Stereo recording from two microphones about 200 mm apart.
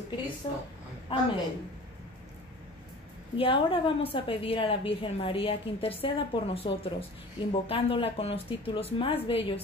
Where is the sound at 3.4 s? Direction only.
25° left (ahead or behind).